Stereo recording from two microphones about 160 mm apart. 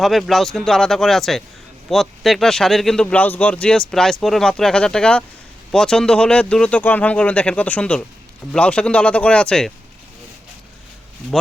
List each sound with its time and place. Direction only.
0.0 s speech: centre (ahead or behind)